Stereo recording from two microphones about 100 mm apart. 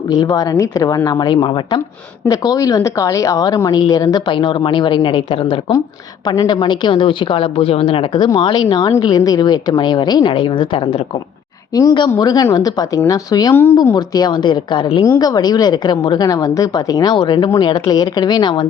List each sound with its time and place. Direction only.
0.1 s a woman's voice: 40° left (ahead or behind)
1.2 s a woman's voice: 50° left (ahead or behind)
2.2 s a woman's voice: 40° left (ahead or behind); by 5.7 s 60° left (ahead or behind)
6.2 s a woman's voice: 40° left (ahead or behind); by 11.2 s 60° left (ahead or behind)
11.7 s a woman's voice: 35° left (ahead or behind)
13.5 s speech: 25° left (ahead or behind)
13.9 s a woman's voice: 45° left (ahead or behind)
15.0 s a woman's voice: 35° left (ahead or behind)